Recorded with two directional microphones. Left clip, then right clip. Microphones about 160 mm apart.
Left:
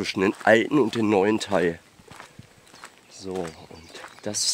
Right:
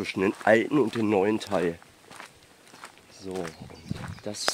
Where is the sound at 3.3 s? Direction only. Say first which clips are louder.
Left 3 dB; 50° left (ahead or behind).